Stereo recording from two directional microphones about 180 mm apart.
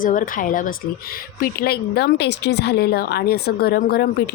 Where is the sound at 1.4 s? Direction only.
60° left (ahead or behind).